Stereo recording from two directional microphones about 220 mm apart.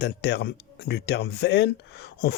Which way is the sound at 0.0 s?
50° left (ahead or behind).